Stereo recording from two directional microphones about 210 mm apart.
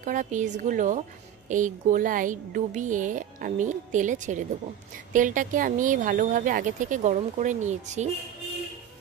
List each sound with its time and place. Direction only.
0.0 s speech: 35° right (ahead or behind)